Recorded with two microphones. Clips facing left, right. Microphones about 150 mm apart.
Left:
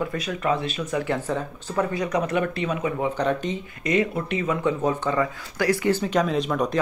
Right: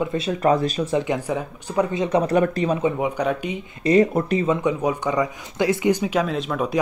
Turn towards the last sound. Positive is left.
turn(degrees=-5)  # may be behind; listen again after turning